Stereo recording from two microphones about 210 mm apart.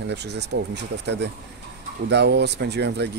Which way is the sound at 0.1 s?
55° right (ahead or behind).